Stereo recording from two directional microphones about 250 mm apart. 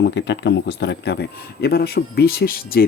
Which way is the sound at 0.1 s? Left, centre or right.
Left.